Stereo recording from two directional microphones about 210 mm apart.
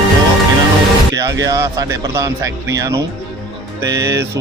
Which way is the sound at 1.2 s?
15° right (ahead or behind).